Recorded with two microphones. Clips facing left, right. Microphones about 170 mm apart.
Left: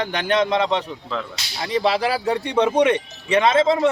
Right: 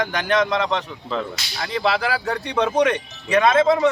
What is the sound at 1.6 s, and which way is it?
Whip, 30° left (ahead or behind).